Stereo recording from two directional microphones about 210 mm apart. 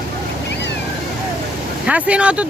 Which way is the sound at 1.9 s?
5° right (ahead or behind).